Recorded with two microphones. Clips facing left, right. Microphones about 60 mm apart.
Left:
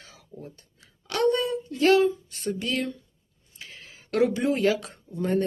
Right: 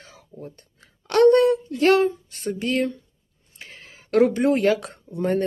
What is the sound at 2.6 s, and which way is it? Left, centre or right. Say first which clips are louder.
Speech: right 8 dB; right.